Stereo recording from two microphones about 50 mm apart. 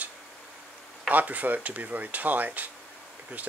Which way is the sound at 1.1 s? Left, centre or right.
Right.